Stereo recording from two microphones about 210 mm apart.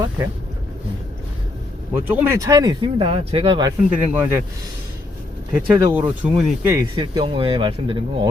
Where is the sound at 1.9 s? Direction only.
10° right (ahead or behind).